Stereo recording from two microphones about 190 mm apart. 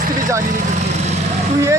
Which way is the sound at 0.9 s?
35° right (ahead or behind).